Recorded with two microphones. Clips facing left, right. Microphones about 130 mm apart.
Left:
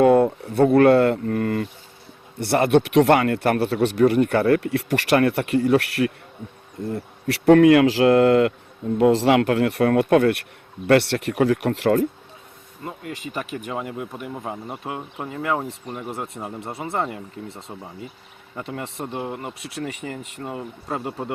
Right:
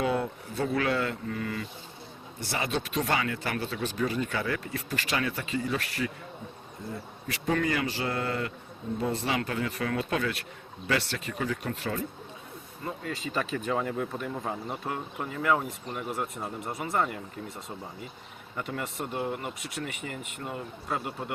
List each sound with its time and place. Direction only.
0.0 s speech: 55° left (ahead or behind); by 8.5 s 75° left (ahead or behind)
9.0 s speech: 90° left
12.8 s speech: 15° left (ahead or behind)